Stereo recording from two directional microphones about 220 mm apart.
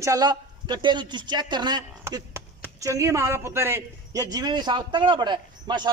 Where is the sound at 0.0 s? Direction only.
15° right (ahead or behind).